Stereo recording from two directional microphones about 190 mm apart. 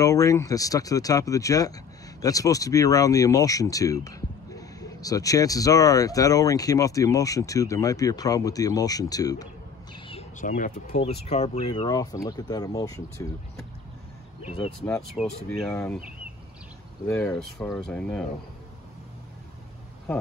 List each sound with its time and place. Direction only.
0.0 s speech: 15° left (ahead or behind)
10.4 s speech: 40° left (ahead or behind); by 13.3 s 20° left (ahead or behind)
14.4 s speech: 30° left (ahead or behind)
15.1 s speech: 5° left (ahead or behind)
17.1 s speech: 10° left (ahead or behind)